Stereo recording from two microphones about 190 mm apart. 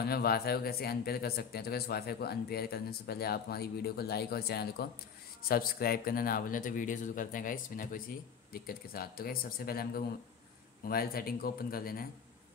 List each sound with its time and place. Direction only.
0.0 s speech: 55° left (ahead or behind)